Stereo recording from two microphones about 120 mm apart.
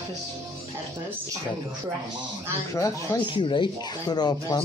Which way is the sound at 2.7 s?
25° left (ahead or behind).